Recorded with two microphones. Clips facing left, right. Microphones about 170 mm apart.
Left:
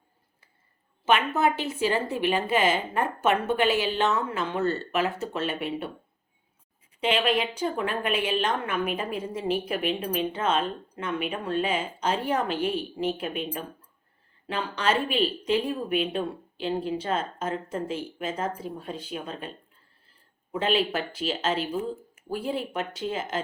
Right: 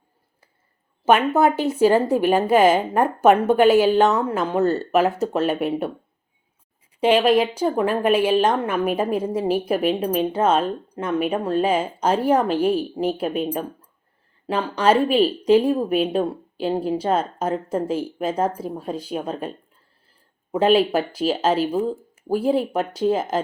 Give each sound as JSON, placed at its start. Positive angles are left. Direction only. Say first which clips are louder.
{"t": 1.0, "sound": "a woman's voice", "louder": "right 7 dB", "side_deg": -40}
{"t": 7.0, "sound": "a woman's voice", "louder": "right 8 dB", "side_deg": -40}
{"t": 20.5, "sound": "a woman's voice", "louder": "right 9 dB", "side_deg": -40}